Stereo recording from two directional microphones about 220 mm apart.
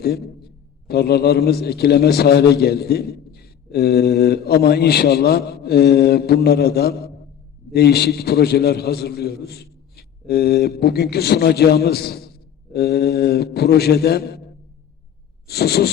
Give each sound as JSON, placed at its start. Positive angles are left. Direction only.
{"t": 0.0, "sound": "a man's voice", "side_deg": 45}
{"t": 15.4, "sound": "a man's voice", "side_deg": 45}